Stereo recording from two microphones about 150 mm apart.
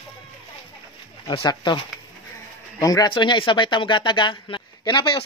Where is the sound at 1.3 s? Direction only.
30° left (ahead or behind).